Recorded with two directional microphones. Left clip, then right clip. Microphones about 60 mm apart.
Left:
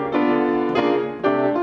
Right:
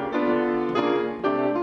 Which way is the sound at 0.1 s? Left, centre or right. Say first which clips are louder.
Left 4 dB; left.